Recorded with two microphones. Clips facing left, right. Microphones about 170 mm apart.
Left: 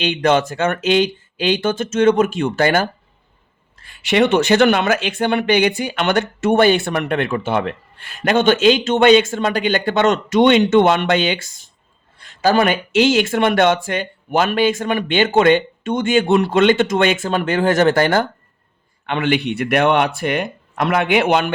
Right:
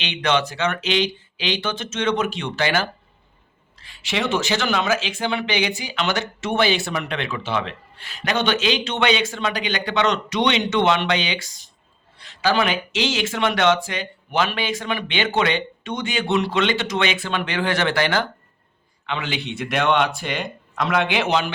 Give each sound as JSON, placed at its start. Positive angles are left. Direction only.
{"t": 0.0, "sound": "speech", "side_deg": 45}
{"t": 19.0, "sound": "speech", "side_deg": 55}